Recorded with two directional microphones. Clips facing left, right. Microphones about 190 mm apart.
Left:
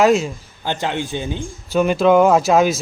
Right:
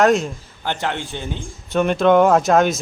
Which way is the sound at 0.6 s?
15° left (ahead or behind).